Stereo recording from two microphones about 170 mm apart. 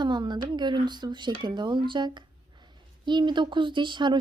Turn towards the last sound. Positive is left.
turn(degrees=-25)  # may be behind; listen again after turning